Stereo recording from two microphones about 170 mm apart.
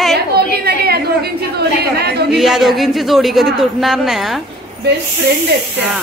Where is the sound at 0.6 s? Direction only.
65° right (ahead or behind).